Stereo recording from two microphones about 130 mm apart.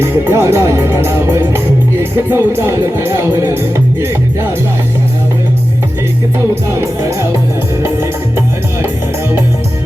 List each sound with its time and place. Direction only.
0.0 s speech: 20° right (ahead or behind)